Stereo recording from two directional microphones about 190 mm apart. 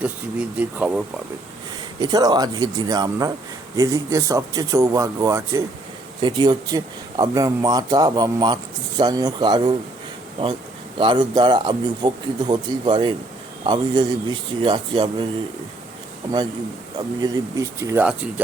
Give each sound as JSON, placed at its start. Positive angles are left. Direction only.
{"t": 0.0, "sound": "speech", "side_deg": -5}
{"t": 2.0, "sound": "speech", "side_deg": -20}
{"t": 17.2, "sound": "speech", "side_deg": -20}